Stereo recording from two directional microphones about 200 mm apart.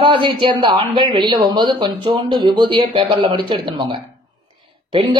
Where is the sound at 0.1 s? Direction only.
25° right (ahead or behind).